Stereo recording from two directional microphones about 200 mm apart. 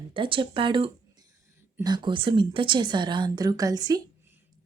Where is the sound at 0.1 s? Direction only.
25° right (ahead or behind).